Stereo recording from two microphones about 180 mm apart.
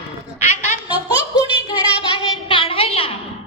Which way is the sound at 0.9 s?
20° left (ahead or behind).